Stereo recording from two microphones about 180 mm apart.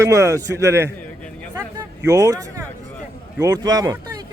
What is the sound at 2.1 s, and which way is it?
A man's voice, 20° right (ahead or behind).